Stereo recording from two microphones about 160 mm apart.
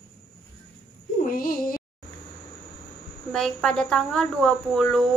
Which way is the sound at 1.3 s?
65° left (ahead or behind).